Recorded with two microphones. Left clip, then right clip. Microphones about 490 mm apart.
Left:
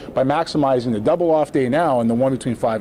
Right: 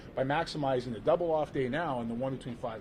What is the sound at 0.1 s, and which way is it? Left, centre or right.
A man's voice, left.